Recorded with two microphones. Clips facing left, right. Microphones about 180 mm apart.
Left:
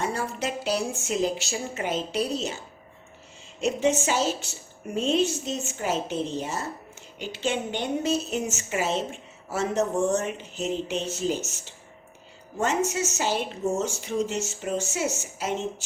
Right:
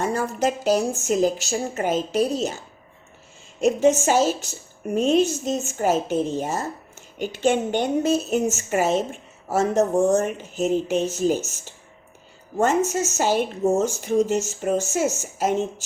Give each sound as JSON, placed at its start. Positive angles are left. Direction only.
{"t": 0.0, "sound": "a woman's voice", "side_deg": -45}
{"t": 3.6, "sound": "a woman's voice", "side_deg": -45}